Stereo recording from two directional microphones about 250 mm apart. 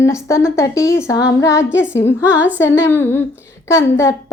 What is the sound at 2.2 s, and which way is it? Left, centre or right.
Humming, centre.